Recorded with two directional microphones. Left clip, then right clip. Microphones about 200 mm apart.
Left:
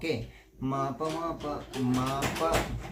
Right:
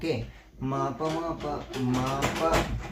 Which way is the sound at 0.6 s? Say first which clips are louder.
Right 2 dB; 10° right (ahead or behind).